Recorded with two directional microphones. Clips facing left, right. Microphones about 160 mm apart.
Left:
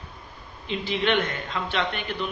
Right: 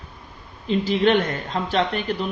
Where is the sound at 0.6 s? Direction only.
40° right (ahead or behind).